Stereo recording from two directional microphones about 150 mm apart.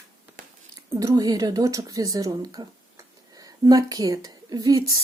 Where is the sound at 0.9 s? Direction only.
25° right (ahead or behind).